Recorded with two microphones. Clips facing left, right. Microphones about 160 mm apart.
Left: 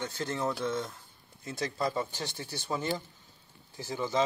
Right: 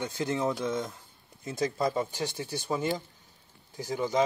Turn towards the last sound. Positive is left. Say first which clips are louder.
# right 3 dB
turn(degrees=-15)  # may be behind; listen again after turning